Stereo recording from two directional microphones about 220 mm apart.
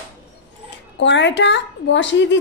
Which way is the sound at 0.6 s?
55° left (ahead or behind).